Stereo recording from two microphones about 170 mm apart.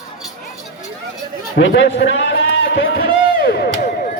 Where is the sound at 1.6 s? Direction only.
90° left.